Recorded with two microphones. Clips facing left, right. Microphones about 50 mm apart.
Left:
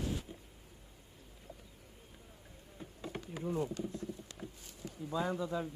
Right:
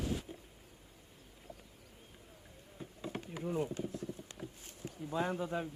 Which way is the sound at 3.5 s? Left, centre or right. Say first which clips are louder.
Even; centre.